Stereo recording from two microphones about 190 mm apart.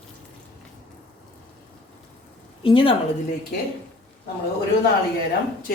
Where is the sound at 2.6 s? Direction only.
30° left (ahead or behind).